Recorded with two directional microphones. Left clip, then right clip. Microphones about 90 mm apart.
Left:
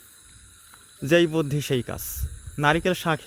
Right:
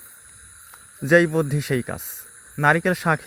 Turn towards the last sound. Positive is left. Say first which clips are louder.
# right 3 dB
turn(degrees=-20)  # may be behind; listen again after turning